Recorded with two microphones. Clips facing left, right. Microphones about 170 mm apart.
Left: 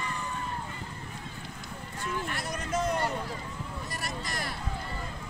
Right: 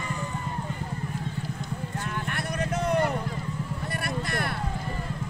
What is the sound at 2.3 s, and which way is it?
Vehicle, 60° right (ahead or behind).